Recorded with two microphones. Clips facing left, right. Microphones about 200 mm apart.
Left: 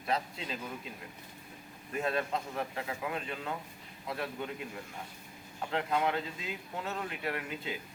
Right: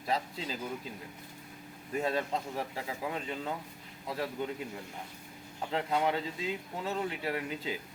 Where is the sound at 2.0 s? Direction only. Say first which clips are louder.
Right 1 dB; 30° right (ahead or behind).